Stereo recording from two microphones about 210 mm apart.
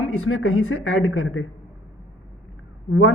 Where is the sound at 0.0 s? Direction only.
85° left.